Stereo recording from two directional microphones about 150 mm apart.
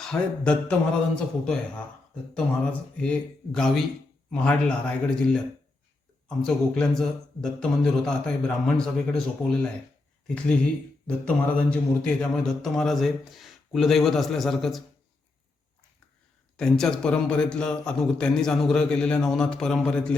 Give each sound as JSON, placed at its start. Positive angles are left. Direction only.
{"t": 0.0, "sound": "speech", "side_deg": 5}
{"t": 3.0, "sound": "speech", "side_deg": 5}
{"t": 16.6, "sound": "speech", "side_deg": 5}